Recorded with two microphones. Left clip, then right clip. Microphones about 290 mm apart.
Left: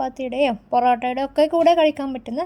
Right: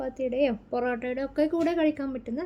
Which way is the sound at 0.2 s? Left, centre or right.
Left.